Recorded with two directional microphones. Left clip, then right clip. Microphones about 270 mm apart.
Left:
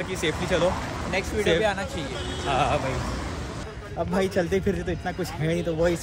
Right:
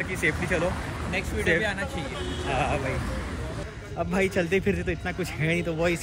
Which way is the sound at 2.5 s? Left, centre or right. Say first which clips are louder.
Left 4 dB; centre.